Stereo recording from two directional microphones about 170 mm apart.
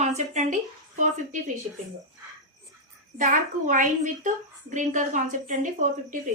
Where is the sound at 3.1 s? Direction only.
50° right (ahead or behind).